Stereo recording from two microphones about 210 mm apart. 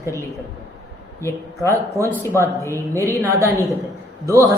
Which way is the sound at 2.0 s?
15° right (ahead or behind).